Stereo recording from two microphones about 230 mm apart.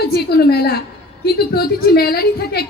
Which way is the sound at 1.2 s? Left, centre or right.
Left.